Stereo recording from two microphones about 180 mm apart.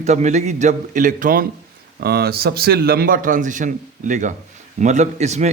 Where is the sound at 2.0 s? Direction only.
60° right (ahead or behind).